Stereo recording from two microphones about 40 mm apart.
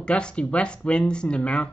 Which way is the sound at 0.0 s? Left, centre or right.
Left.